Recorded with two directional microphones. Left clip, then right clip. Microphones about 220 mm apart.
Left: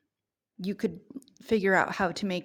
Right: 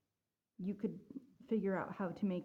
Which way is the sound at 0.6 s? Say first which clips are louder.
Left 11 dB; 30° left (ahead or behind).